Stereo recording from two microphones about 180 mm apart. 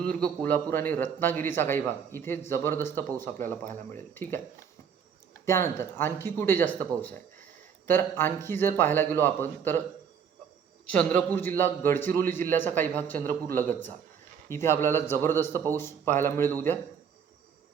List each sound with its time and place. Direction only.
0.0 s a man's voice: 5° left (ahead or behind)
5.5 s a man's voice: 15° left (ahead or behind)
10.8 s a man's voice: 5° left (ahead or behind)